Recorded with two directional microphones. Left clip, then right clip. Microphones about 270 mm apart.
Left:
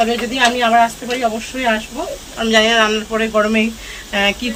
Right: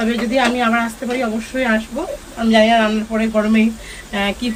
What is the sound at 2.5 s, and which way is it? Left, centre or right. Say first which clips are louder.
Speech: left 1 dB; centre.